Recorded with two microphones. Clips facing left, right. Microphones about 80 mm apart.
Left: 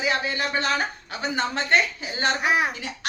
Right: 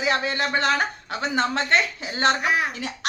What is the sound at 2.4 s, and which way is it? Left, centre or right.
Speech, centre.